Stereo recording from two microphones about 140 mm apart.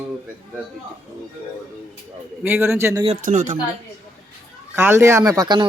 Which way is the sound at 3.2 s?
70° right (ahead or behind).